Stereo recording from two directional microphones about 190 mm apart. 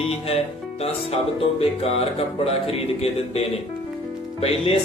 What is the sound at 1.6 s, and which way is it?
Music, 30° left (ahead or behind).